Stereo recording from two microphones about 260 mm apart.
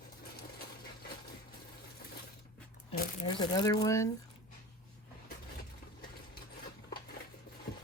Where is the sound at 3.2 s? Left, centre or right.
Centre.